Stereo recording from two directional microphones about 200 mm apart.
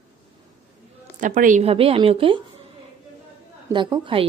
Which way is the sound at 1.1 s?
40° right (ahead or behind).